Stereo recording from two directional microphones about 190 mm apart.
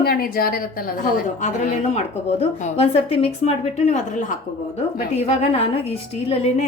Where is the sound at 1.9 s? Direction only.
35° left (ahead or behind).